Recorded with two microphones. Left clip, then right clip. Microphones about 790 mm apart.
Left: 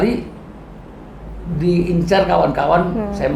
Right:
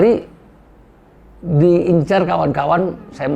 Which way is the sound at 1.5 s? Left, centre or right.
Right.